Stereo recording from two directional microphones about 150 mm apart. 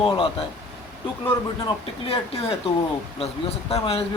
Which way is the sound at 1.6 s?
40° left (ahead or behind).